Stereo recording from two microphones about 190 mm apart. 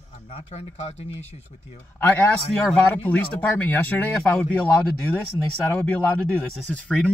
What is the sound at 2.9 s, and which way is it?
A man's voice, 10° left (ahead or behind).